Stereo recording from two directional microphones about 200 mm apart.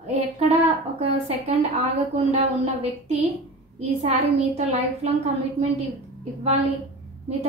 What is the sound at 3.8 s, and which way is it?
A woman's voice, 30° right (ahead or behind).